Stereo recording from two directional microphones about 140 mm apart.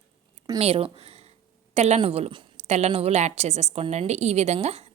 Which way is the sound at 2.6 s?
50° right (ahead or behind).